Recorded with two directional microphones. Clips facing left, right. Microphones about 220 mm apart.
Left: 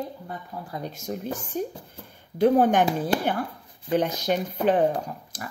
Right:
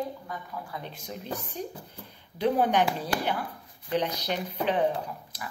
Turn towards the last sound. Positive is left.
turn(degrees=45)  # may be behind; listen again after turning